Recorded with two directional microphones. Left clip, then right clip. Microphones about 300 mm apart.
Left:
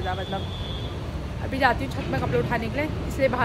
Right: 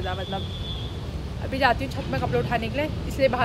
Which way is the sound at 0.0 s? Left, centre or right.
Centre.